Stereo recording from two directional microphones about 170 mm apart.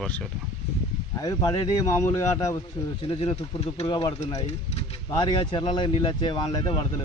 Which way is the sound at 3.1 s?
35° left (ahead or behind).